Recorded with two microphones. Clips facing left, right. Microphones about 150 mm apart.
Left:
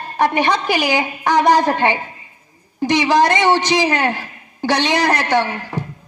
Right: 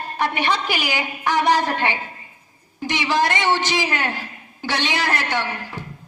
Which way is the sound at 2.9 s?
15° left (ahead or behind).